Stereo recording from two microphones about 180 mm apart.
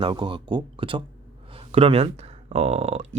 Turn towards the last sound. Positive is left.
turn(degrees=-35)  # may be behind; listen again after turning